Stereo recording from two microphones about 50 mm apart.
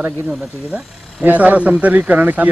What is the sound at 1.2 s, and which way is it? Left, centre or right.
Speech, right.